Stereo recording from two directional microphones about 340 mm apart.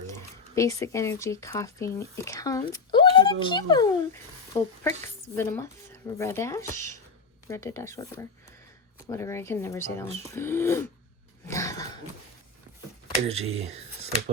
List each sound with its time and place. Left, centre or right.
0.1 s speech: centre
11.4 s a sound: centre
13.2 s speech: centre